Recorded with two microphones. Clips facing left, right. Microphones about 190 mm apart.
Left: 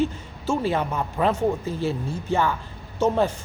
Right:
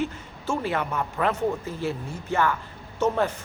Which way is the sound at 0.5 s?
25° left (ahead or behind).